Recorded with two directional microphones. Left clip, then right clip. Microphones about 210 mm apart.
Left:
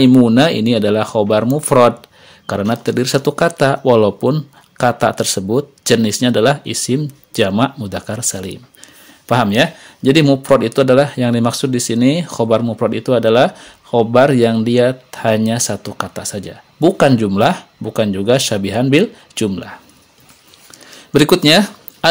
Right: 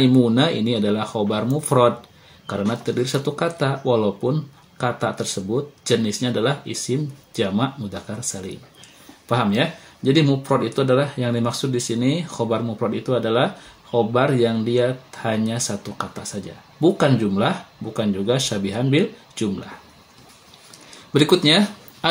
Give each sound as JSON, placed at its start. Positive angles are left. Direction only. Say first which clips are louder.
{"t": 0.0, "sound": "speech", "louder": "left 7 dB", "side_deg": 40}
{"t": 21.1, "sound": "speech", "louder": "left 6 dB", "side_deg": 40}